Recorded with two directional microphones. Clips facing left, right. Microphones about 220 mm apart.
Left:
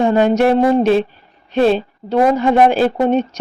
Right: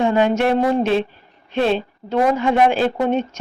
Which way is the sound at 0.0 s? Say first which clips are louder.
Left 4 dB; 40° left (ahead or behind).